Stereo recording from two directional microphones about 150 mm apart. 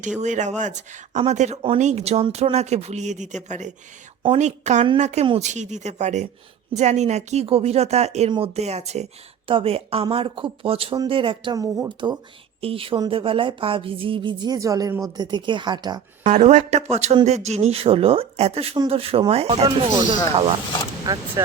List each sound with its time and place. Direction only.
0.2 s speech: 55° right (ahead or behind)
4.3 s speech: 50° right (ahead or behind)
11.5 s speech: 25° right (ahead or behind)
16.2 s speech: 55° right (ahead or behind)
19.6 s speech: 30° right (ahead or behind)